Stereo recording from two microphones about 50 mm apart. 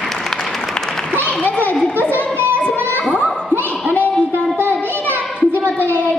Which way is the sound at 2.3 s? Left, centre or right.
Right.